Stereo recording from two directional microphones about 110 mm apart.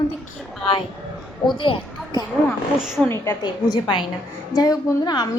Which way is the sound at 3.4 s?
45° left (ahead or behind).